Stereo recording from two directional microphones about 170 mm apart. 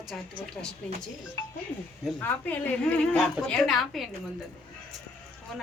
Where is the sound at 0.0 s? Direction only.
Centre (ahead or behind).